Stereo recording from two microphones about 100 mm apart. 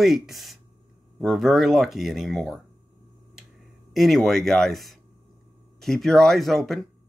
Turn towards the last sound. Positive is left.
turn(degrees=0)  # may be behind; listen again after turning